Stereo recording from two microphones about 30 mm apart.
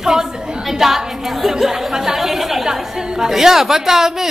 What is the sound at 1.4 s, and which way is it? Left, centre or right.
Chatter, centre.